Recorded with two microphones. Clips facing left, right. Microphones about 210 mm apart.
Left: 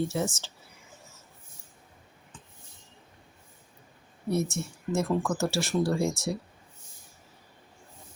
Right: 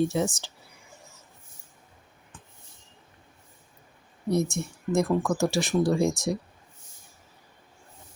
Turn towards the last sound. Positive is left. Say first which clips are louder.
# right 4 dB
turn(degrees=-15)  # may be behind; listen again after turning